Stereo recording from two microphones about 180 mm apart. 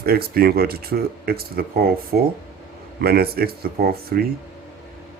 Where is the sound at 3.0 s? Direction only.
60° right (ahead or behind).